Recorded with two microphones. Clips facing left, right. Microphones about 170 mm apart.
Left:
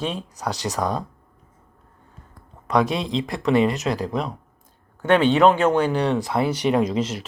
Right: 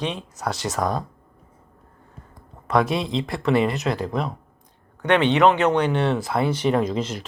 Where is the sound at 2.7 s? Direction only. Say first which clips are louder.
Even; centre (ahead or behind).